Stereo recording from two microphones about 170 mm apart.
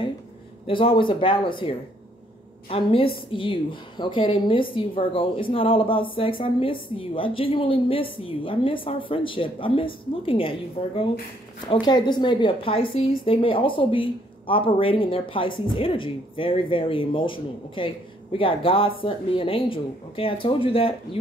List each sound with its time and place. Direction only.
0.7 s a woman's voice: 30° left (ahead or behind)
11.6 s a woman's voice: 25° left (ahead or behind)